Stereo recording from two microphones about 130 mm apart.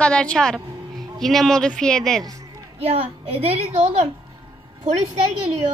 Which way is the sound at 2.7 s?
50° right (ahead or behind).